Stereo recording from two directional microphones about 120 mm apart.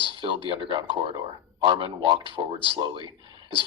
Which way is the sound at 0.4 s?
45° right (ahead or behind).